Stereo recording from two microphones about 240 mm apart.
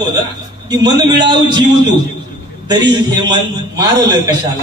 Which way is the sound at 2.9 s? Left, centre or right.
Centre.